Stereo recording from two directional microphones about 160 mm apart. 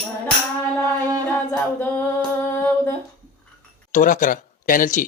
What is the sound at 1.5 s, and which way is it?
Singing, 10° left (ahead or behind).